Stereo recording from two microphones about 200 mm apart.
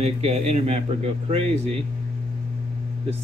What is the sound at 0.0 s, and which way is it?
Speech, 30° right (ahead or behind).